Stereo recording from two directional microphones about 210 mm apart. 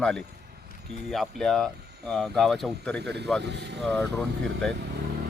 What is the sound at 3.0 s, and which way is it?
Speech, 55° right (ahead or behind).